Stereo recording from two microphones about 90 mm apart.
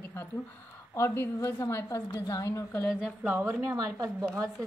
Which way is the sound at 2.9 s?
10° right (ahead or behind).